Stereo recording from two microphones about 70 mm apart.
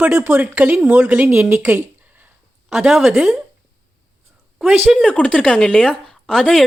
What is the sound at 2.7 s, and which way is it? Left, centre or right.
Speech, centre.